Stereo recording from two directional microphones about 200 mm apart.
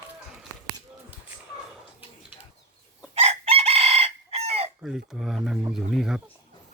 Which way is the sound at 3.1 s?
30° right (ahead or behind).